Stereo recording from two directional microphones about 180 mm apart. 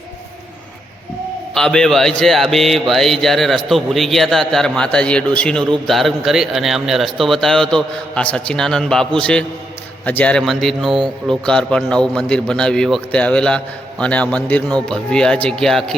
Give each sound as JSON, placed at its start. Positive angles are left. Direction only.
{"t": 1.5, "sound": "a man's voice", "side_deg": 5}
{"t": 10.9, "sound": "speech", "side_deg": -25}
{"t": 11.4, "sound": "a man's voice", "side_deg": 5}